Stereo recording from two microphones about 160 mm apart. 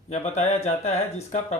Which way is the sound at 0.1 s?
45° left (ahead or behind).